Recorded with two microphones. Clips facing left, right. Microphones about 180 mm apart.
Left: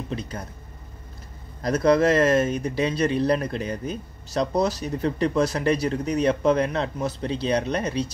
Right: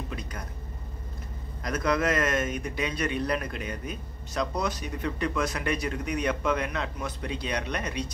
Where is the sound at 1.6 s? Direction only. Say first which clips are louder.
Left 8 dB; 35° left (ahead or behind).